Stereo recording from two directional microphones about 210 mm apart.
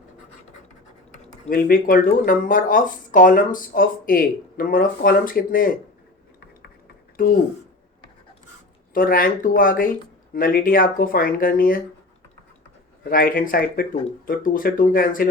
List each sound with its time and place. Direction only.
1.5 s speech: 45° left (ahead or behind)
7.2 s speech: 40° left (ahead or behind)
8.9 s speech: 40° left (ahead or behind)
13.1 s speech: 40° left (ahead or behind)